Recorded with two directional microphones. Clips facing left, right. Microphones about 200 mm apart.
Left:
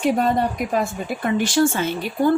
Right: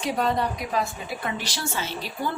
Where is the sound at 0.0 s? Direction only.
50° left (ahead or behind).